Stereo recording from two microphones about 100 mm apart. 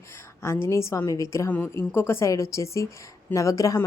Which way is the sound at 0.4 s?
25° left (ahead or behind).